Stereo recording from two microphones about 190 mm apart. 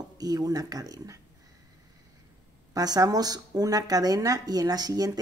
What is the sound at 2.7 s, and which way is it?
Speech, 20° right (ahead or behind).